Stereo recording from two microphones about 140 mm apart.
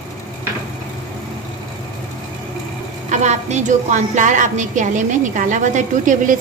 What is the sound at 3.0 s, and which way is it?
A woman's voice, 55° right (ahead or behind).